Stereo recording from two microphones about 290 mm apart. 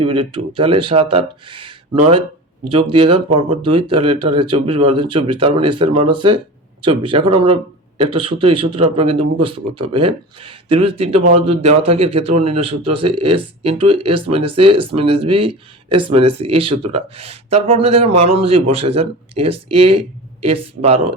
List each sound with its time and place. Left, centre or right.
0.0 s a man's voice: centre